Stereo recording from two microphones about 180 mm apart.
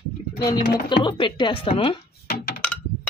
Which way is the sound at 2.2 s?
60° left (ahead or behind).